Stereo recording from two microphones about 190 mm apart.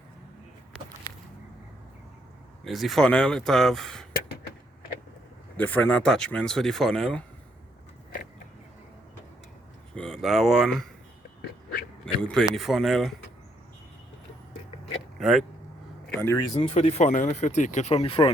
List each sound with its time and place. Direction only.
2.6 s speech: centre (ahead or behind)
5.5 s speech: 10° left (ahead or behind)
9.9 s speech: 5° left (ahead or behind)
12.2 s speech: 5° left (ahead or behind)
15.2 s speech: centre (ahead or behind)
16.0 s speech: 10° left (ahead or behind)
16.6 s speech: 30° left (ahead or behind)